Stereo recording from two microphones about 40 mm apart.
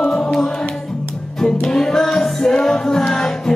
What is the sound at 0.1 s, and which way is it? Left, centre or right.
Music, centre.